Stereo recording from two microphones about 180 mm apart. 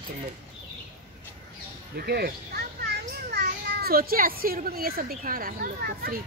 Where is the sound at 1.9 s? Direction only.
60° right (ahead or behind).